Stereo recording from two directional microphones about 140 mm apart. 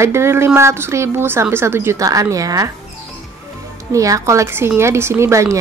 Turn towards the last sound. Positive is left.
turn(degrees=-20)  # may be behind; listen again after turning